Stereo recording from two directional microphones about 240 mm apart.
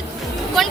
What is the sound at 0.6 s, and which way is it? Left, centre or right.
Vehicle, centre.